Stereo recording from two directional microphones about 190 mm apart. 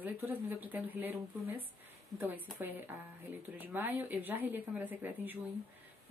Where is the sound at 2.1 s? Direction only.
10° right (ahead or behind).